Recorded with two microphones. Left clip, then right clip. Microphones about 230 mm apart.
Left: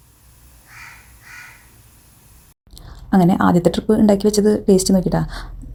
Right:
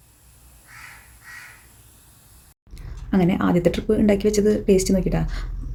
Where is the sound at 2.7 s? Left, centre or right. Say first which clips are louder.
Left 6 dB; left.